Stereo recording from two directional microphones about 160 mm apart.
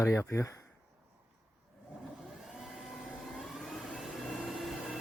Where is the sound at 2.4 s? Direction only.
Centre (ahead or behind).